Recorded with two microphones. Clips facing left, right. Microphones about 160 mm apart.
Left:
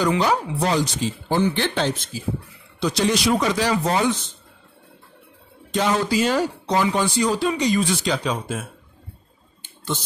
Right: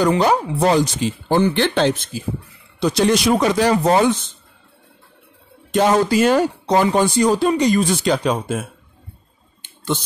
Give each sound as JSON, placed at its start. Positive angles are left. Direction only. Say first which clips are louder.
{"t": 0.0, "sound": "speech", "louder": "right 4 dB", "side_deg": -50}
{"t": 2.8, "sound": "speech", "louder": "right 4 dB", "side_deg": -50}
{"t": 5.7, "sound": "speech", "louder": "right 6 dB", "side_deg": -50}